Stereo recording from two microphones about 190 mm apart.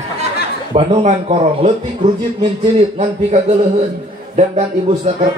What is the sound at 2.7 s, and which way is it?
Speech, 35° right (ahead or behind).